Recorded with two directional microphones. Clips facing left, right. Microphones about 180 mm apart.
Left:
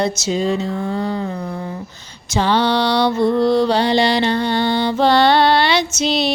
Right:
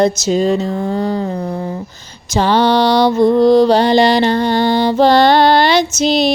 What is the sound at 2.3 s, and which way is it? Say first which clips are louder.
Music: right 4 dB; 40° right (ahead or behind).